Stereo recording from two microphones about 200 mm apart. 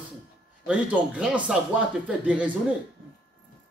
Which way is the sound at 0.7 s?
5° right (ahead or behind).